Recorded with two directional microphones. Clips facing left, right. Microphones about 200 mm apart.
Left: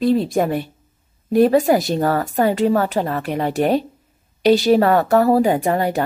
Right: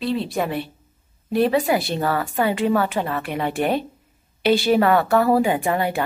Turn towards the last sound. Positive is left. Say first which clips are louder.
# left 3 dB
turn(degrees=40)  # may be behind; listen again after turning